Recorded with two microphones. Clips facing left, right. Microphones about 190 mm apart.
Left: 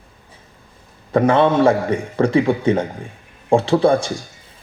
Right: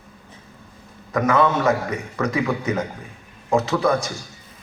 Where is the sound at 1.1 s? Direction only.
30° left (ahead or behind).